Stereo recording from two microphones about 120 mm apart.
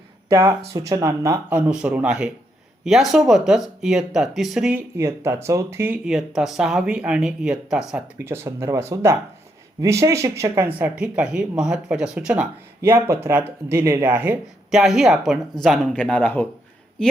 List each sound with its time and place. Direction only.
0.3 s speech: 25° right (ahead or behind)
1.5 s speech: 10° right (ahead or behind)
4.9 s speech: 25° right (ahead or behind)
6.1 s speech: 5° right (ahead or behind)
8.2 s speech: 20° right (ahead or behind)
10.8 s speech: 10° right (ahead or behind)
12.8 s speech: 20° right (ahead or behind)
14.7 s speech: 5° right (ahead or behind); by 16.5 s 15° left (ahead or behind)